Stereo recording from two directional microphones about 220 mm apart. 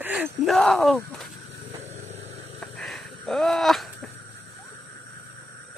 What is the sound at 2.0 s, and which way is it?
Vehicle, 30° right (ahead or behind).